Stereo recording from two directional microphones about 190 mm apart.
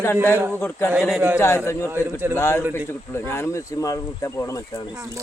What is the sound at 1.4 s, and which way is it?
Speech, 15° left (ahead or behind).